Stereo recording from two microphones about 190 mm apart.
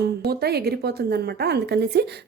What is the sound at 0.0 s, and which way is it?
A woman's voice, 55° right (ahead or behind).